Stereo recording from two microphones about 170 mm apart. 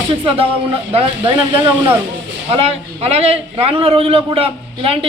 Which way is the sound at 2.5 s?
35° right (ahead or behind).